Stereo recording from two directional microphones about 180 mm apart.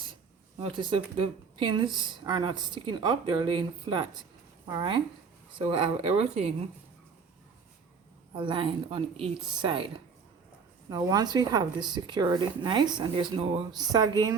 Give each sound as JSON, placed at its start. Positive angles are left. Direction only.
{"t": 0.6, "sound": "speech", "side_deg": -30}
{"t": 8.4, "sound": "speech", "side_deg": -25}